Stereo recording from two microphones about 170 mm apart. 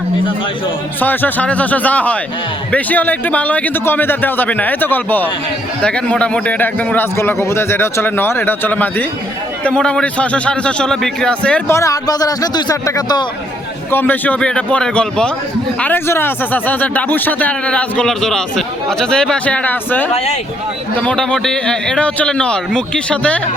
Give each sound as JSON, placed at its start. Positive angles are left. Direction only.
{"t": 0.9, "sound": "speech", "side_deg": 10}
{"t": 11.8, "sound": "speech", "side_deg": 20}
{"t": 13.9, "sound": "speech", "side_deg": 10}
{"t": 20.1, "sound": "speech", "side_deg": 40}
{"t": 20.9, "sound": "a man's voice", "side_deg": 5}